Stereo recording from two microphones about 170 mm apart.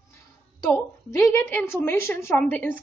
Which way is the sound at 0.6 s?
15° left (ahead or behind).